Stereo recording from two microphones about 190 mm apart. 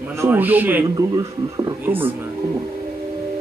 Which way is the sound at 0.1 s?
10° right (ahead or behind).